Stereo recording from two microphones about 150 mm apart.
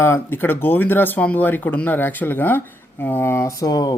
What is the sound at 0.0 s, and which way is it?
Speech, 15° left (ahead or behind).